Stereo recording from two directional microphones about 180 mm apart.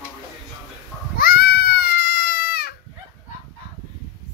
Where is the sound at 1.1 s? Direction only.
55° left (ahead or behind).